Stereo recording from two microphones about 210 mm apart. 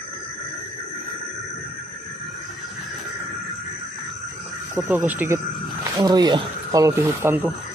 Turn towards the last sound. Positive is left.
turn(degrees=-10)  # may be behind; listen again after turning